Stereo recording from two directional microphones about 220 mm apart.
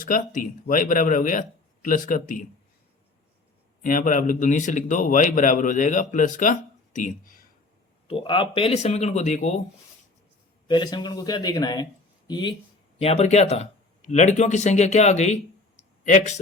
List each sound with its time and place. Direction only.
0.0 s speech: 40° left (ahead or behind)
3.8 s speech: 40° left (ahead or behind)
8.0 s speech: 25° left (ahead or behind)
10.7 s a man's voice: 20° left (ahead or behind)